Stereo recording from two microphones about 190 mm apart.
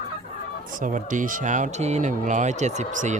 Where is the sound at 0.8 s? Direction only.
45° right (ahead or behind).